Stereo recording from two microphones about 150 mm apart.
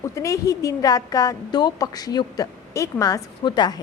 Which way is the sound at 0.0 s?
20° left (ahead or behind).